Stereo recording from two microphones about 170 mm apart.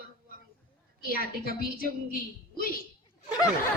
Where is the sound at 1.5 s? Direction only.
55° left (ahead or behind).